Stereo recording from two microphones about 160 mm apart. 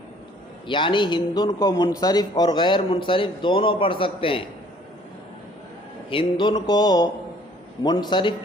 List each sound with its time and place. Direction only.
0.7 s a man's voice: 30° left (ahead or behind)
6.1 s speech: 30° left (ahead or behind)